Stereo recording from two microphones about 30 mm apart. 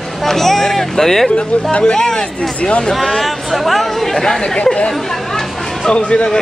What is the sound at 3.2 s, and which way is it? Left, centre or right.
Speech, centre.